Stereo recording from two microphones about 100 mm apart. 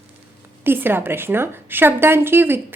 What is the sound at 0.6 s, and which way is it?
A woman's voice, 20° right (ahead or behind).